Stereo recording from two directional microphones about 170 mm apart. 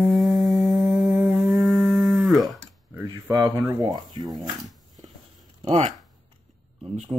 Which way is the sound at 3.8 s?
25° right (ahead or behind).